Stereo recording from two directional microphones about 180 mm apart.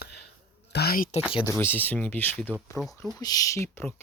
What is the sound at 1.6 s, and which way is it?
Speech, 10° left (ahead or behind).